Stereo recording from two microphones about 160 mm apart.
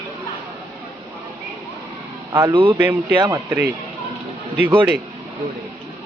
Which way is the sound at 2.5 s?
30° right (ahead or behind).